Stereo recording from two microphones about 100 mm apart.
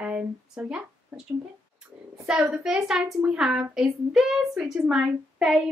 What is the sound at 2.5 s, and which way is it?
Speech, 5° right (ahead or behind).